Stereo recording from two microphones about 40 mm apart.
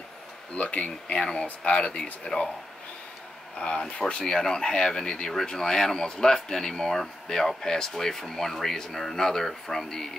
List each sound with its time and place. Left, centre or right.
0.6 s speech: left
3.5 s speech: left; by 10.1 s centre